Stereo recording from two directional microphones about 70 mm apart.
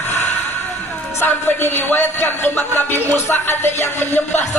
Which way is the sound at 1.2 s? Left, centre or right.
Left.